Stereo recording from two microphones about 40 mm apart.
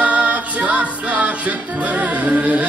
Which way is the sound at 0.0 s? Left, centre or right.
Right.